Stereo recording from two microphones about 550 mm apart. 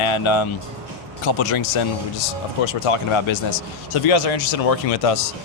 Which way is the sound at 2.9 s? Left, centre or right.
Left.